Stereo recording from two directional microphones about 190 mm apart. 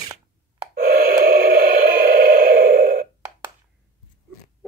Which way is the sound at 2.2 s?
45° right (ahead or behind).